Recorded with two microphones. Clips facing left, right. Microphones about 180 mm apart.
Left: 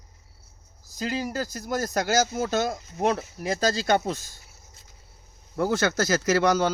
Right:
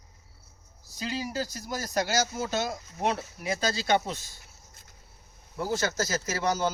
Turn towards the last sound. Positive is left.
turn(degrees=75)  # may be behind; listen again after turning